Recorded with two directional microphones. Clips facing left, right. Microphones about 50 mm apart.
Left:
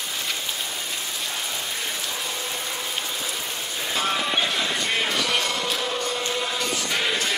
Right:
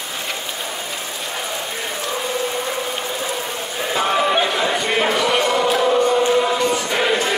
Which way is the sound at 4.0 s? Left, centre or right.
Right.